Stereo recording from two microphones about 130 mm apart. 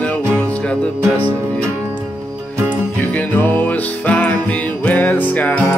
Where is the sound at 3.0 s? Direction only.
15° left (ahead or behind).